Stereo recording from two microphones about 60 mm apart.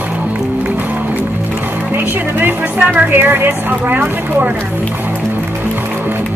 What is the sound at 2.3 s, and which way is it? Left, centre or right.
Speech, right.